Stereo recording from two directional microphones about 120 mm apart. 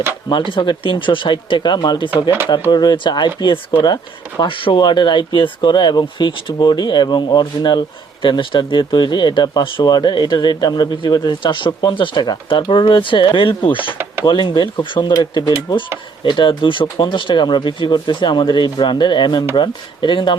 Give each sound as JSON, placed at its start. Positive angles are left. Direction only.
{"t": 0.3, "sound": "speech", "side_deg": 40}